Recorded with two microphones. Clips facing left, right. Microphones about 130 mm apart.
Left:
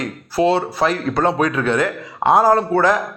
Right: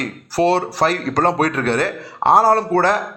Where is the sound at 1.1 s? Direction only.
40° right (ahead or behind).